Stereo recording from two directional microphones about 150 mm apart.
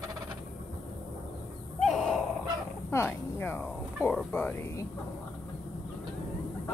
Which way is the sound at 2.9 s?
15° left (ahead or behind).